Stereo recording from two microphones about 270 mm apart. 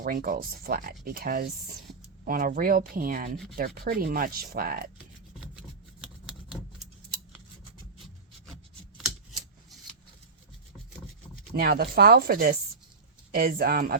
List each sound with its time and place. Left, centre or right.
0.0 s speech: right
9.0 s typewriter: centre
11.5 s speech: right